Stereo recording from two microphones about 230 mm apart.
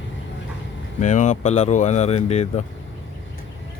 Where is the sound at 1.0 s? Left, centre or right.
Left.